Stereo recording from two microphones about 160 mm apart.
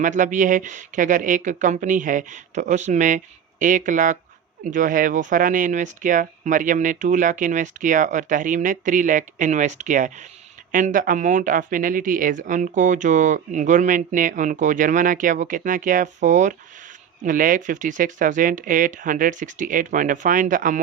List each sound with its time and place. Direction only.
0.0 s speech: 55° right (ahead or behind)